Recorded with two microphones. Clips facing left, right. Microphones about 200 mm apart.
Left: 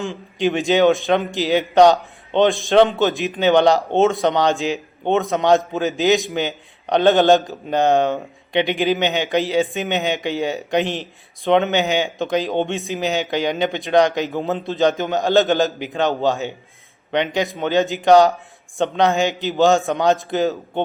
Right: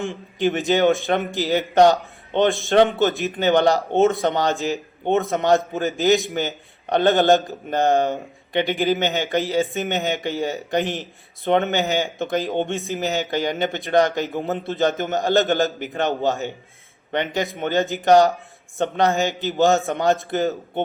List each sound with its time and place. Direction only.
0.3 s a man's voice: 15° left (ahead or behind)